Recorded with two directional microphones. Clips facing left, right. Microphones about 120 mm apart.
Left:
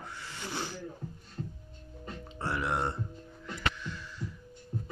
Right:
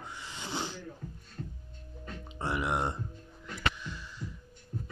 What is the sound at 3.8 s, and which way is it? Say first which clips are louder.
Heart sounds: left 2 dB; 15° right (ahead or behind).